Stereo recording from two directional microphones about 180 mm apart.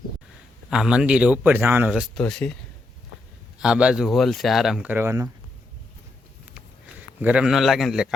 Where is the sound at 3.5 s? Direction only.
5° right (ahead or behind).